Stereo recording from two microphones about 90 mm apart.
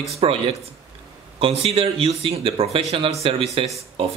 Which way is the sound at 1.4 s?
90° right.